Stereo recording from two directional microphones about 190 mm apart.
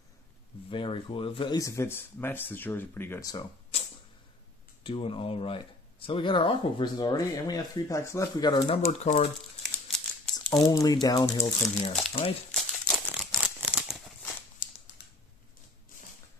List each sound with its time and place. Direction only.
0.7 s speech: 25° left (ahead or behind)
4.8 s speech: 30° left (ahead or behind)
9.6 s crumpling: centre (ahead or behind)
10.3 s speech: 20° left (ahead or behind)
12.4 s crumpling: centre (ahead or behind)